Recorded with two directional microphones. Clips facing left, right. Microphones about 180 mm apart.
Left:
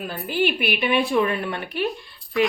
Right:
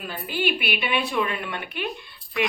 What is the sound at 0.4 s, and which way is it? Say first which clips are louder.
A woman's voice: left 4 dB; 45° left (ahead or behind).